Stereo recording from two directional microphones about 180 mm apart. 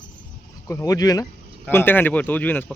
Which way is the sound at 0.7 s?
20° left (ahead or behind).